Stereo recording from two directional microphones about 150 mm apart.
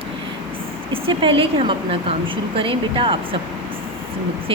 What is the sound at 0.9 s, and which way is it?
Speech, 35° right (ahead or behind).